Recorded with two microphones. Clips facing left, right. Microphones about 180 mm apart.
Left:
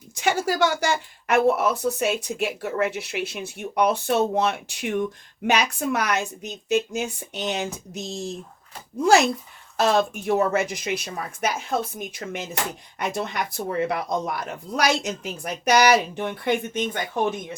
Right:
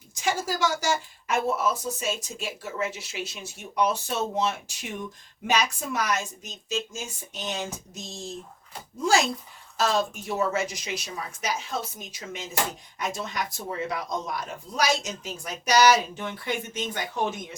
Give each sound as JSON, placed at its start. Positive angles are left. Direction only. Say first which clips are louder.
{"t": 0.1, "sound": "a woman's voice", "louder": "left 5 dB", "side_deg": 65}
{"t": 9.7, "sound": "a woman's voice", "louder": "left 5 dB", "side_deg": 60}